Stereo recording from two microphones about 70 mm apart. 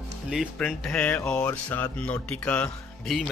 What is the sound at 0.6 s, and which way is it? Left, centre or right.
Speech, centre.